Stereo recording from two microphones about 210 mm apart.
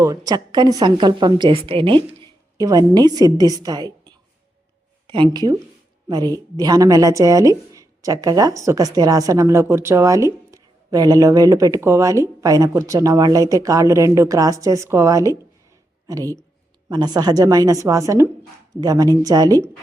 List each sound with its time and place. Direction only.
0.0 s a woman's voice: 15° right (ahead or behind)